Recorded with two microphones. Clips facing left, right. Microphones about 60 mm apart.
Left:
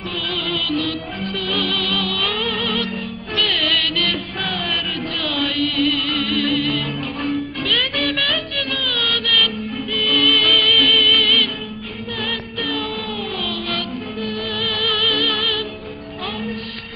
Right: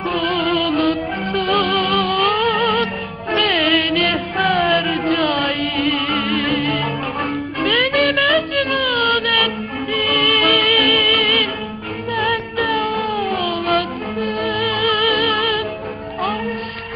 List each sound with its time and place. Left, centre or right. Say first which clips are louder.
0.1 s music: right 6 dB; right
8.4 s music: right 6 dB; right